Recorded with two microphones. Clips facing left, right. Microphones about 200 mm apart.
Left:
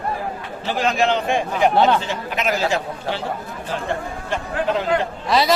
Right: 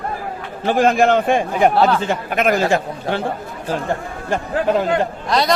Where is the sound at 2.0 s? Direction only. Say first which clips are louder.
Right 6 dB; 50° right (ahead or behind).